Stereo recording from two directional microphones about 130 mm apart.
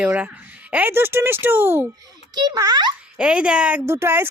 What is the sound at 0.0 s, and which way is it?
Speech, 10° right (ahead or behind).